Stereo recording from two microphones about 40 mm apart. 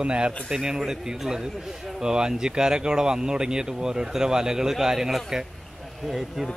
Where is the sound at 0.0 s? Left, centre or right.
Right.